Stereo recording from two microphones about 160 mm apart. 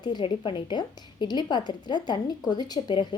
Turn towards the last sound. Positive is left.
turn(degrees=30)  # may be behind; listen again after turning